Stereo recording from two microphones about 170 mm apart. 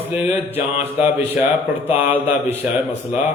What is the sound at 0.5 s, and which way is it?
A man's voice, 10° right (ahead or behind).